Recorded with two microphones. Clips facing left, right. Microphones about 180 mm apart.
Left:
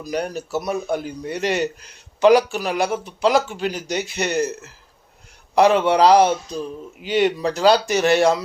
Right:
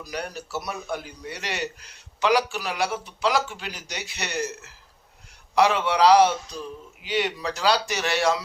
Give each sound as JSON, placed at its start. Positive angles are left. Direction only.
{"t": 0.0, "sound": "speech", "side_deg": 50}